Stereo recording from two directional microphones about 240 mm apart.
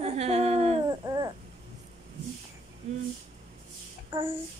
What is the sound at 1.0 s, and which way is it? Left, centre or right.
Babbling, centre.